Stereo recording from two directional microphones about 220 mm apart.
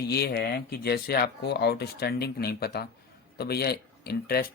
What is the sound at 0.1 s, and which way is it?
Speech, 45° left (ahead or behind).